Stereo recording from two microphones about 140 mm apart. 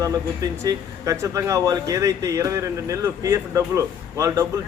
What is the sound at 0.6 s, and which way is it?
Speech, 20° right (ahead or behind).